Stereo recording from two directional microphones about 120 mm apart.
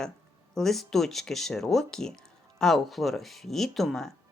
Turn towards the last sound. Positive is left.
turn(degrees=0)  # may be behind; listen again after turning